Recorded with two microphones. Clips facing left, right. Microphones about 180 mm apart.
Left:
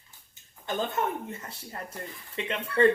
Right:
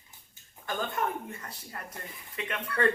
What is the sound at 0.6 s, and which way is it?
Speech, 25° left (ahead or behind).